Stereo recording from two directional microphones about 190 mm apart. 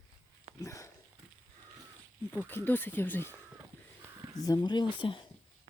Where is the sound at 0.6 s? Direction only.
15° left (ahead or behind).